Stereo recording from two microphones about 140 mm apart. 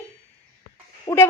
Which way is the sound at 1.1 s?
35° left (ahead or behind).